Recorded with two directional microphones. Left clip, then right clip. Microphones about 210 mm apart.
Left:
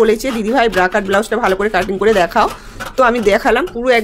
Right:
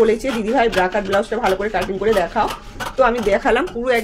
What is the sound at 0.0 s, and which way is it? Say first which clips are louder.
Speech: left 3 dB; 25° left (ahead or behind).